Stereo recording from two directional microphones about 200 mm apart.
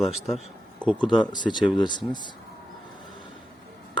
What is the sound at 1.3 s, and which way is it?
Speech, 20° left (ahead or behind).